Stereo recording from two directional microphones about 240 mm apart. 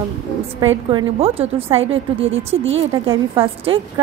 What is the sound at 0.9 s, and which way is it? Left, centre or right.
A woman's voice, right.